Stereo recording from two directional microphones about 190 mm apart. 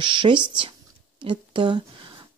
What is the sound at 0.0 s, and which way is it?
Speech, 25° right (ahead or behind).